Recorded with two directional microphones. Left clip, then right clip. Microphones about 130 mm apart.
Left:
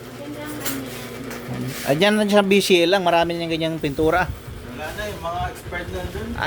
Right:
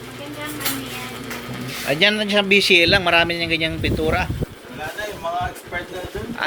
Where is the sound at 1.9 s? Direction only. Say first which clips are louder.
Even; 80° left; by 3.0 s 55° left (ahead or behind).